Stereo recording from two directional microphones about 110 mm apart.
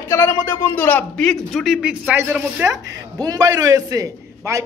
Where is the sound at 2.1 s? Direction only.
20° right (ahead or behind).